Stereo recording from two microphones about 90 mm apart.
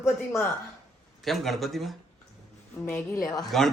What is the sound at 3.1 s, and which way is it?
Speech, 40° left (ahead or behind).